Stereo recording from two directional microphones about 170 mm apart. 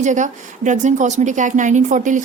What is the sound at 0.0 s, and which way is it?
Speech, 45° right (ahead or behind).